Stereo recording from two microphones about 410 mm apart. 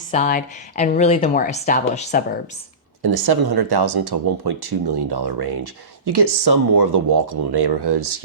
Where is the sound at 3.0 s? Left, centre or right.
Right.